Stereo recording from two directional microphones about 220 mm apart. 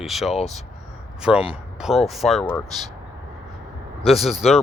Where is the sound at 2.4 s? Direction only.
10° left (ahead or behind).